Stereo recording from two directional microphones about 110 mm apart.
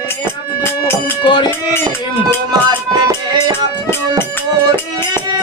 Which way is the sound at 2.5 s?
35° right (ahead or behind).